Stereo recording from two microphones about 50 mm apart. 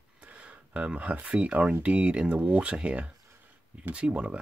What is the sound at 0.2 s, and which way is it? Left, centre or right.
Speech, right.